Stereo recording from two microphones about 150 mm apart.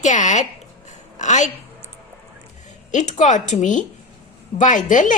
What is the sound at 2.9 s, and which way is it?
Speech, 55° left (ahead or behind).